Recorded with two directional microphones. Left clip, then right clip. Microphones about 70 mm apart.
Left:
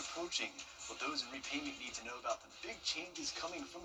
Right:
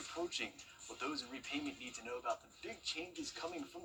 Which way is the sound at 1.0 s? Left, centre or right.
Centre.